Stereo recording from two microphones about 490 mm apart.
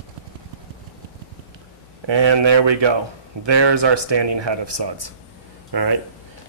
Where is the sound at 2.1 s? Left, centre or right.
Right.